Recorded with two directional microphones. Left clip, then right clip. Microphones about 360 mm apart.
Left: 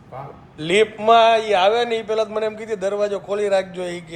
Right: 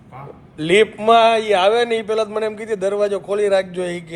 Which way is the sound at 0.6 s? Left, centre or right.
Right.